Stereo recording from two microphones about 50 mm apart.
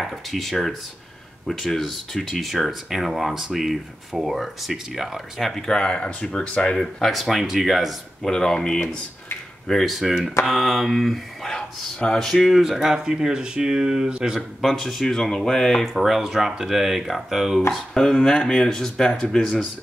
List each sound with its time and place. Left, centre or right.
0.0 s speech: centre
5.5 s speech: centre
6.8 s speech: centre
8.3 s speech: centre
9.9 s speech: centre
11.5 s speech: centre
12.5 s speech: centre
14.6 s speech: centre
16.0 s speech: centre
17.9 s speech: centre